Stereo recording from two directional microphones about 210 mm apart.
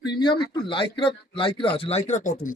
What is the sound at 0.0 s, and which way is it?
Speech, 20° left (ahead or behind).